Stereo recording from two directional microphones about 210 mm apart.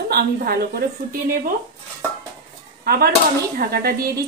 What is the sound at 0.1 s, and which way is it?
Speech, 45° right (ahead or behind).